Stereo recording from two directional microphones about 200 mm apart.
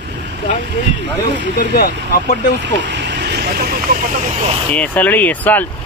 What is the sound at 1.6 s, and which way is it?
Speech, 45° left (ahead or behind).